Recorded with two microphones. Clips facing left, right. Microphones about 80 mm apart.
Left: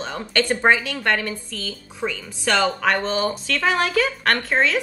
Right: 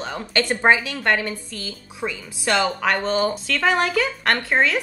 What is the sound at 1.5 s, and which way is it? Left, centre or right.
A woman's voice, centre.